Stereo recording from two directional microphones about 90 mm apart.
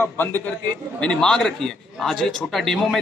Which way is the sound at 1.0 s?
10° left (ahead or behind).